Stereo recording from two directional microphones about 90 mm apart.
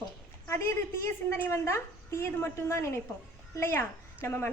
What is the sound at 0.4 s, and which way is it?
A woman's voice, 30° left (ahead or behind).